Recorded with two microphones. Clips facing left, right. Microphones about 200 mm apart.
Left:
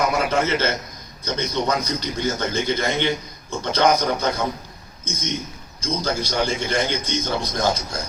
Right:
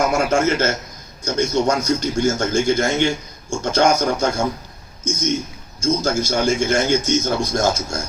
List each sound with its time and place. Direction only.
0.0 s a man's voice: 45° right (ahead or behind)